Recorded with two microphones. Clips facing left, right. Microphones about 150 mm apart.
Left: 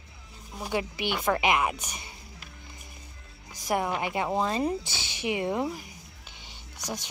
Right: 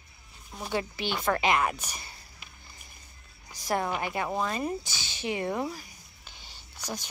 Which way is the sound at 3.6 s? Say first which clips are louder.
Left 1 dB; 20° left (ahead or behind).